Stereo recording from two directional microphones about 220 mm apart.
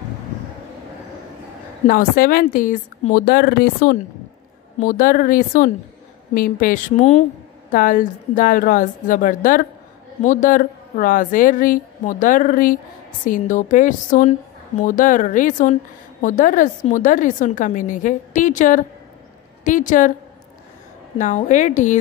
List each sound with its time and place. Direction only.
1.9 s a woman's voice: 40° left (ahead or behind)
21.2 s a woman's voice: 35° left (ahead or behind)